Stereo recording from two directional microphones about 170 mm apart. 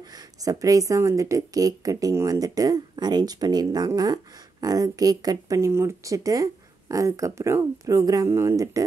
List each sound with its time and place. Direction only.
0.1 s speech: 20° right (ahead or behind)